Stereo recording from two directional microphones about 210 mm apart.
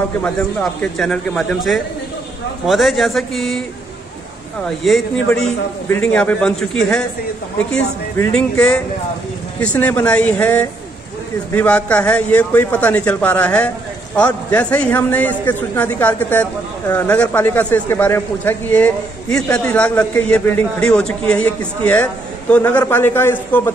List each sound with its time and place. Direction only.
0.2 s a man's voice: 5° left (ahead or behind)
4.8 s a man's voice: centre (ahead or behind)